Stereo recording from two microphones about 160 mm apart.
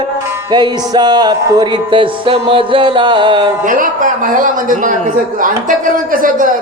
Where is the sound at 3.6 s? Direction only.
55° right (ahead or behind).